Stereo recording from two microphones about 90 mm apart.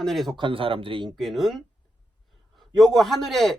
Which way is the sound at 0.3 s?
75° right (ahead or behind).